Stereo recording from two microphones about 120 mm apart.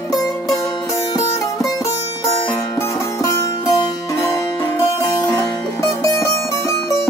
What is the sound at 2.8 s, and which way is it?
Music, 25° left (ahead or behind).